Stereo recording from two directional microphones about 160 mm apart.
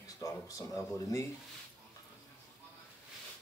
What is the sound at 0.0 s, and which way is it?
Speech, 20° left (ahead or behind).